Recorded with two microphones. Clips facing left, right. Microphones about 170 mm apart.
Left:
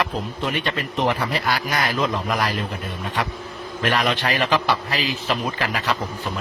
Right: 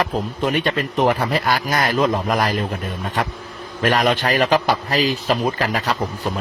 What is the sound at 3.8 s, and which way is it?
A man's voice, 45° right (ahead or behind).